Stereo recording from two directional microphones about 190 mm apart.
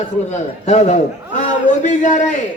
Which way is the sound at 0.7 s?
40° left (ahead or behind).